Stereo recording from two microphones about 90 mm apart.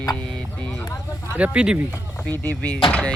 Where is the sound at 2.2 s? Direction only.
20° left (ahead or behind).